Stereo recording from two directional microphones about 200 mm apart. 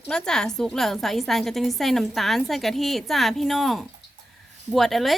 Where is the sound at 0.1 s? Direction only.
5° left (ahead or behind).